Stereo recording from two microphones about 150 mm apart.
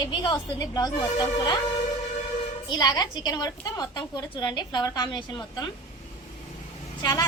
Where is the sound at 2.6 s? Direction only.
25° left (ahead or behind).